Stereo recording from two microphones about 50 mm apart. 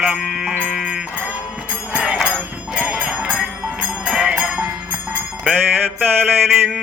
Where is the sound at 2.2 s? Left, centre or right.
Right.